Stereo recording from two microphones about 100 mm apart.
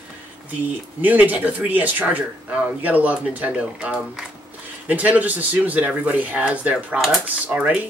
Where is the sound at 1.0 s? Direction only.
15° right (ahead or behind).